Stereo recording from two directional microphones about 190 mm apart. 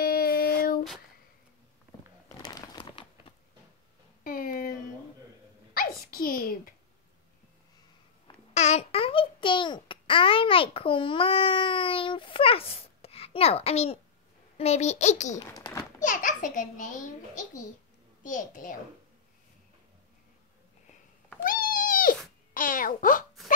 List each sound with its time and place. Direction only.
0.0 s child singing: 50° left (ahead or behind)
0.6 s a sound: 50° left (ahead or behind)
2.4 s crumpling: 25° left (ahead or behind)
4.2 s a sound: 50° left (ahead or behind)
5.8 s a sound: 50° left (ahead or behind)
8.5 s babbling: 35° left (ahead or behind)
14.6 s a child's voice: 35° left (ahead or behind)
21.5 s cat: 45° left (ahead or behind)
22.5 s music: 45° left (ahead or behind)